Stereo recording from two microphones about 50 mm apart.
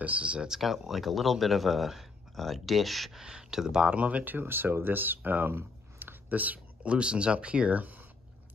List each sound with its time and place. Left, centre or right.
0.0 s speech: right
0.5 s speech: centre
3.9 s speech: right